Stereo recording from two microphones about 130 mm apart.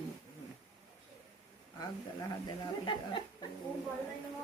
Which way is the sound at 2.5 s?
40° left (ahead or behind).